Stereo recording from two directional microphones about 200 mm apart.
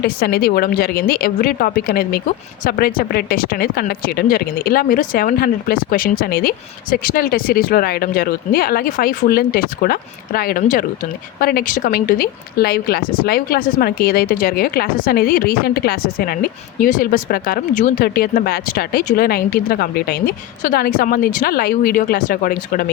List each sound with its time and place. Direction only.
0.0 s speech: 50° left (ahead or behind)